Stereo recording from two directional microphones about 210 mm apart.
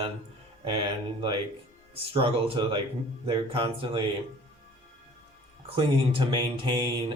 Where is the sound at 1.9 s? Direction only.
25° right (ahead or behind).